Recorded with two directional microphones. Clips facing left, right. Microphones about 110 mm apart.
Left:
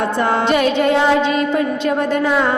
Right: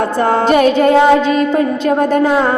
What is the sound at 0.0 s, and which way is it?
Music, 40° right (ahead or behind).